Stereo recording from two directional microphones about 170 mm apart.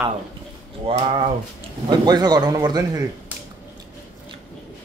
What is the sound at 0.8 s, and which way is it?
A man's voice, 35° right (ahead or behind).